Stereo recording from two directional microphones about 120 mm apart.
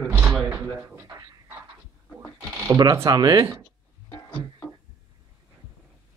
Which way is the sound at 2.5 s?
25° right (ahead or behind).